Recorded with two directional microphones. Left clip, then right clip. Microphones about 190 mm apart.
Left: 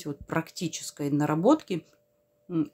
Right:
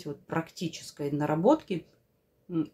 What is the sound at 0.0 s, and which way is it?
Speech, 35° left (ahead or behind).